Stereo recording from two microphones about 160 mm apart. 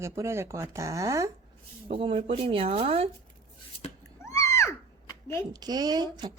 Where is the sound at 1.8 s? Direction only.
35° right (ahead or behind).